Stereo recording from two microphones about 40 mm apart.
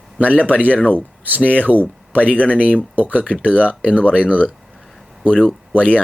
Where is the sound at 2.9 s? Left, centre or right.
Right.